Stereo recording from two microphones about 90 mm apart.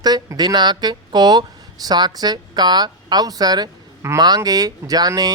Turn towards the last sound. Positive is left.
turn(degrees=-45)  # may be behind; listen again after turning